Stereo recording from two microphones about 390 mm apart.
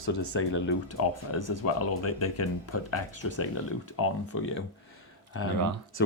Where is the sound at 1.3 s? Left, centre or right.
Left.